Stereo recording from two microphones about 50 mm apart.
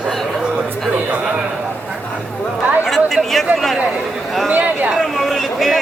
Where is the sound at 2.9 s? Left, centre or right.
Centre.